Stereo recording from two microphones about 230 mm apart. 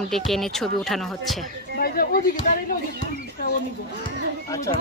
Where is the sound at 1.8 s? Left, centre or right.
Left.